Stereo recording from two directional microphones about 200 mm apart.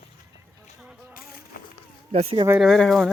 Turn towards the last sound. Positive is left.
turn(degrees=0)  # may be behind; listen again after turning